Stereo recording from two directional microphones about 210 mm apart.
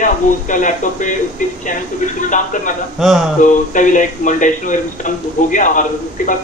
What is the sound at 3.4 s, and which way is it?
Speech, 40° left (ahead or behind).